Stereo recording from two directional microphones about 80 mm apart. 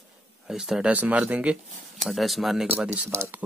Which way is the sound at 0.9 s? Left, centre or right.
Centre.